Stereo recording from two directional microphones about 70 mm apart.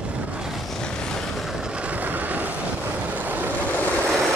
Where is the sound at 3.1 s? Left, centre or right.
Right.